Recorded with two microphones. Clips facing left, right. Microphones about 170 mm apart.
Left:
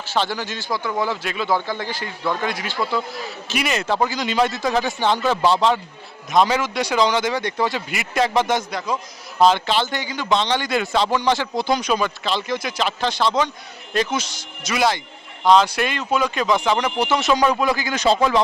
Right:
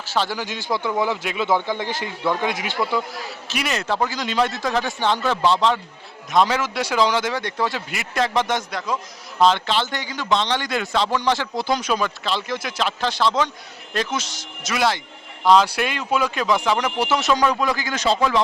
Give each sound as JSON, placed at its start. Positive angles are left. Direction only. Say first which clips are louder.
{"t": 0.0, "sound": "speech", "louder": "left 1 dB", "side_deg": -5}
{"t": 3.5, "sound": "a man's voice", "louder": "left 2 dB", "side_deg": 0}
{"t": 17.3, "sound": "speech", "louder": "left 3 dB", "side_deg": 10}